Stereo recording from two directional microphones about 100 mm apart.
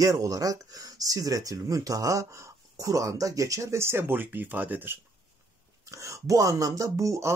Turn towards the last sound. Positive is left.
turn(degrees=-30)  # may be behind; listen again after turning